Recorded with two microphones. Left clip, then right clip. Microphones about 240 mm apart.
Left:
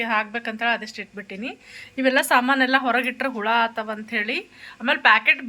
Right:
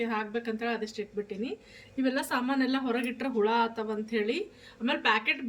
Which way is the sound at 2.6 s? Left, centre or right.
Centre.